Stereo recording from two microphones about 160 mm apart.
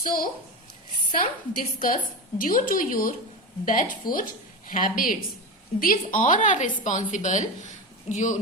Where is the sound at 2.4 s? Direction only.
60° left (ahead or behind).